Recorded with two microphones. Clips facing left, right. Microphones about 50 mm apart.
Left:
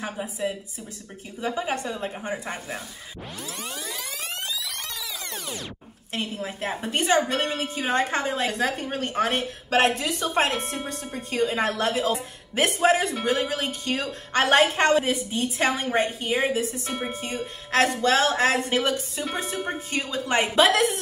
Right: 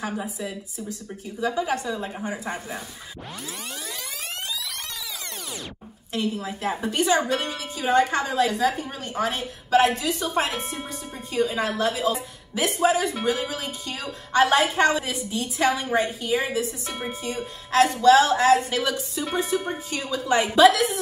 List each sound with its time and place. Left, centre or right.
0.0 s a woman's voice: left
3.6 s music: centre
6.1 s a woman's voice: left